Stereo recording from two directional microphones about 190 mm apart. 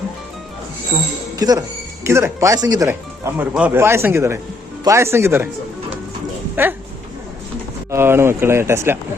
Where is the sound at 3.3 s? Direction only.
10° right (ahead or behind).